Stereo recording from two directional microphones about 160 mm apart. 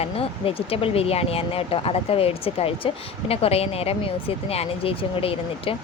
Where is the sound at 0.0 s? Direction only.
35° left (ahead or behind).